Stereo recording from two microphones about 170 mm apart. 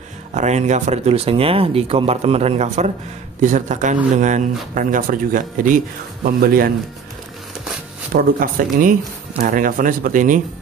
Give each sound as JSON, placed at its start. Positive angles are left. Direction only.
{"t": 0.3, "sound": "speech", "side_deg": -45}
{"t": 8.1, "sound": "speech", "side_deg": -60}